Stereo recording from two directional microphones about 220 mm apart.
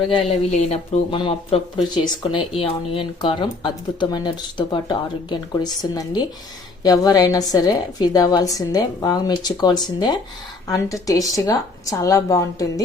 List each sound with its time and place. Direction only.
0.3 s a woman's voice: 30° left (ahead or behind)